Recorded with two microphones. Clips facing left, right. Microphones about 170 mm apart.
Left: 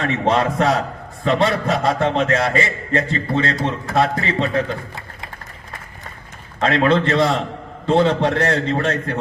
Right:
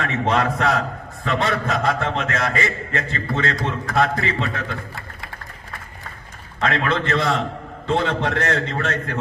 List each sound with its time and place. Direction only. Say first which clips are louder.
0.0 s a man's voice: left 3 dB; 30° left (ahead or behind)
6.6 s a man's voice: left 5 dB; 30° left (ahead or behind)